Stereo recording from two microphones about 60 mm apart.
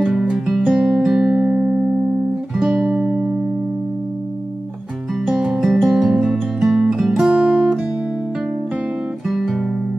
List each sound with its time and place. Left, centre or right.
0.0 s music: centre; by 3.3 s right
5.2 s music: centre
6.3 s guitar: centre
9.3 s guitar: centre